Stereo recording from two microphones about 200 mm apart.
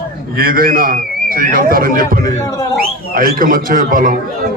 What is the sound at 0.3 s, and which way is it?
A man's voice, 50° right (ahead or behind).